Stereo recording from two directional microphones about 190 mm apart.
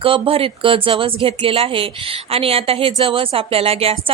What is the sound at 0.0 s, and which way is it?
Speech, 30° right (ahead or behind).